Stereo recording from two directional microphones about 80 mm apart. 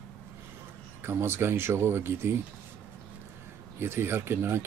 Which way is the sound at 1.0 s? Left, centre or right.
Right.